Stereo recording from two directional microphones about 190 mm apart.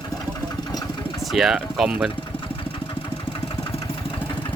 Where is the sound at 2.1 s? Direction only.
25° left (ahead or behind).